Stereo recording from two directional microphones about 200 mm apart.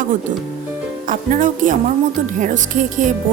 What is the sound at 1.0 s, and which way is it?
Speech, 40° right (ahead or behind).